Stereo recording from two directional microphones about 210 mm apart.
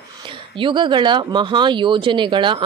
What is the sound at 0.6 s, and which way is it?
Speech, 20° right (ahead or behind).